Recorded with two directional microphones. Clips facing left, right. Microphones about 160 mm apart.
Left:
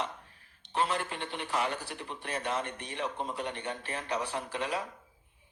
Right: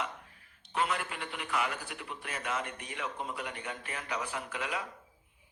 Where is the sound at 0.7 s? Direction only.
30° left (ahead or behind).